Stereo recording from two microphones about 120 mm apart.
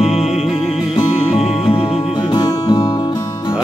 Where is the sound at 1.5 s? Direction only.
55° left (ahead or behind).